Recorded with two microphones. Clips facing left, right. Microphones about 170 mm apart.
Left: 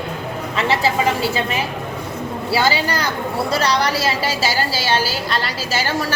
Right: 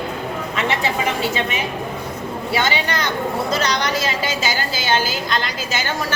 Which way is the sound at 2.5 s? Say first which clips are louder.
Left 3 dB; 35° left (ahead or behind).